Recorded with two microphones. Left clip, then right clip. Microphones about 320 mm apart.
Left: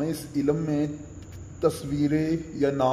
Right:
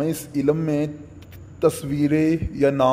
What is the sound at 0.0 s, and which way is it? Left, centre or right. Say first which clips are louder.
A man's voice: right 5 dB; right.